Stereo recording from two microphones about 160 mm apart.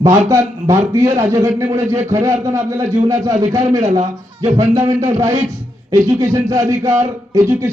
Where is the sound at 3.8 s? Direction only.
45° right (ahead or behind).